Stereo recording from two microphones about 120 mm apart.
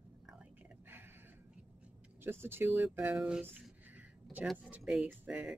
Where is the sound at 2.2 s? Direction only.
20° right (ahead or behind).